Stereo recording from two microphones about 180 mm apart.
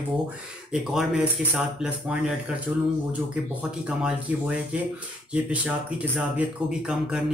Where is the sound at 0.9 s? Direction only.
5° right (ahead or behind).